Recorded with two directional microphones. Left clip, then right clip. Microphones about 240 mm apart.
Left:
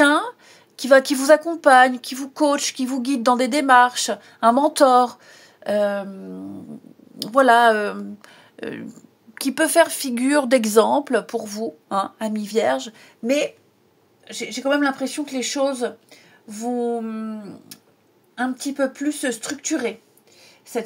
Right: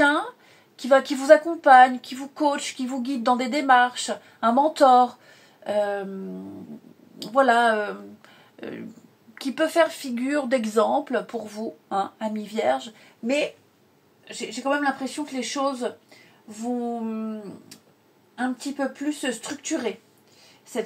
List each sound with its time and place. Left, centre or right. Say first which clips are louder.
0.0 s a woman's voice: left 4 dB; left
7.2 s a woman's voice: left 4 dB; left
14.5 s a woman's voice: left 4 dB; left
18.3 s a woman's voice: left 3 dB; left